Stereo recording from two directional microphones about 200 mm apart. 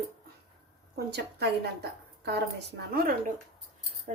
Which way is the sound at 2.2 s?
55° right (ahead or behind).